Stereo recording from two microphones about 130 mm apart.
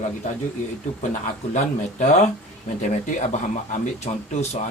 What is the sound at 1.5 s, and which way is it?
Speech, 60° left (ahead or behind).